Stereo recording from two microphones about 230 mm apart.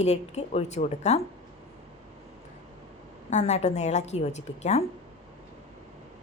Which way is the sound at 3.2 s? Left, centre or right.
Left.